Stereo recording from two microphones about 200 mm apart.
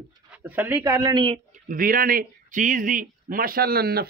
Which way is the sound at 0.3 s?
10° right (ahead or behind).